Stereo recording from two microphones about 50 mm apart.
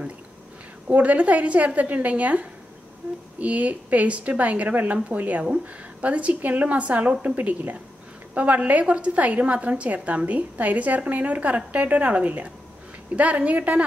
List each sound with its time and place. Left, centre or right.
0.8 s a woman's voice: right